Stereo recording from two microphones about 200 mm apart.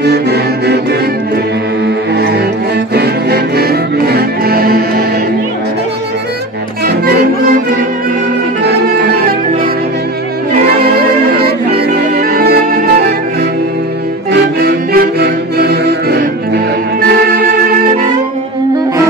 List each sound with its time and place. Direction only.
0.0 s music: 55° right (ahead or behind)
2.1 s music: 55° right (ahead or behind)
8.6 s music: 55° right (ahead or behind)
11.3 s music: 50° right (ahead or behind)
14.3 s music: 55° right (ahead or behind)